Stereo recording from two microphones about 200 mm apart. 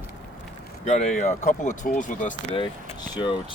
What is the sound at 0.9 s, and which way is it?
Speech, 35° left (ahead or behind).